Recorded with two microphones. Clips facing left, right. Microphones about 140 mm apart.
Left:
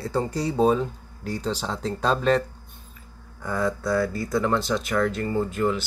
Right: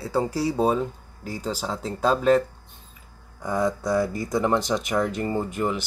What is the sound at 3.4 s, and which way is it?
Speech, 20° right (ahead or behind).